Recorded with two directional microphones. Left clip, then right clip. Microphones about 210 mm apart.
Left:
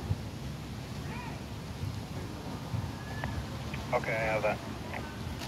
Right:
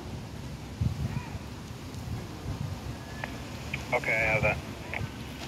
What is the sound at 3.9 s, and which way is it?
Speech, 15° right (ahead or behind).